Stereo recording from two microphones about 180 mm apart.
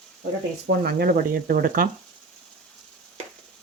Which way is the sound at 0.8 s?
60° right (ahead or behind).